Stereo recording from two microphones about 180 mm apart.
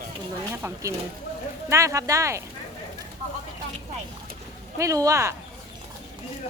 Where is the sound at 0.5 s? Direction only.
15° right (ahead or behind).